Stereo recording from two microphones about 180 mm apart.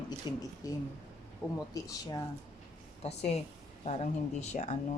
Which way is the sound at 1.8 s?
20° left (ahead or behind).